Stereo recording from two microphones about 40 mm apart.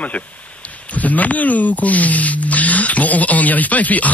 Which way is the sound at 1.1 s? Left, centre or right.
Left.